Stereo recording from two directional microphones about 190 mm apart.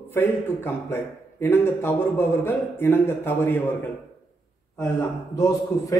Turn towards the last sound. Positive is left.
turn(degrees=15)  # may be behind; listen again after turning